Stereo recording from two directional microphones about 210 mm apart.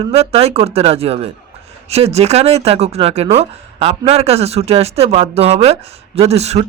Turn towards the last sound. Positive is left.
turn(degrees=-30)  # may be behind; listen again after turning